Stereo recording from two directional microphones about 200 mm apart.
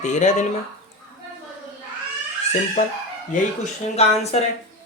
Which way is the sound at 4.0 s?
30° left (ahead or behind).